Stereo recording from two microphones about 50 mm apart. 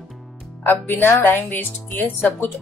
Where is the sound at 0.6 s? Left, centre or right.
Left.